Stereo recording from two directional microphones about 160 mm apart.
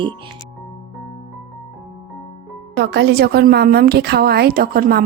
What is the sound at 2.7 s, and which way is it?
A woman's voice, 90° right.